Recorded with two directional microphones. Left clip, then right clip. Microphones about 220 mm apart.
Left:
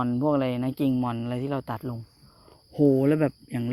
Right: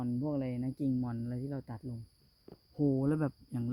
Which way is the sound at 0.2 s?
5° left (ahead or behind).